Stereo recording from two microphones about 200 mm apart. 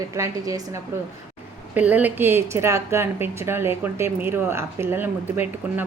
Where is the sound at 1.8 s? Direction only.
10° right (ahead or behind).